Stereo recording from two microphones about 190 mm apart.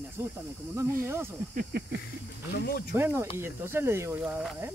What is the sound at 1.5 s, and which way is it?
Hiss, 50° right (ahead or behind).